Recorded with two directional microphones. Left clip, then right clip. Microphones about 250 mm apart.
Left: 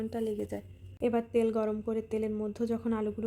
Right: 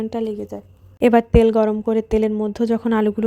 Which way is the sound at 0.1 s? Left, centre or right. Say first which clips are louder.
Right 9 dB; right.